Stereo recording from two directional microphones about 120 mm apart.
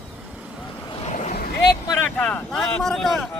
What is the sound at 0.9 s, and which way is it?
Boat, 55° left (ahead or behind).